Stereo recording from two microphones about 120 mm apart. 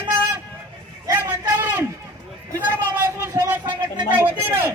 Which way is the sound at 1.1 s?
25° right (ahead or behind).